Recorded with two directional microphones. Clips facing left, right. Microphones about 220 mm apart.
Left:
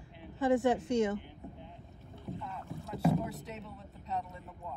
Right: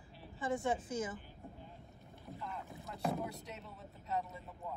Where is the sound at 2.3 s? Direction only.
Centre (ahead or behind).